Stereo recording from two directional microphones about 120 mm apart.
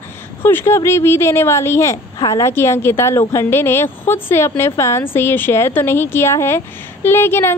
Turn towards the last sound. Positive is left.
turn(degrees=20)  # may be behind; listen again after turning